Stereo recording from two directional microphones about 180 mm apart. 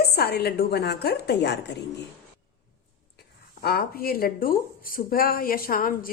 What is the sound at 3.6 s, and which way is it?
Speech, 60° left (ahead or behind).